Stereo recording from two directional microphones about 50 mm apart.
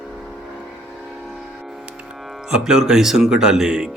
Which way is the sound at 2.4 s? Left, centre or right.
Centre.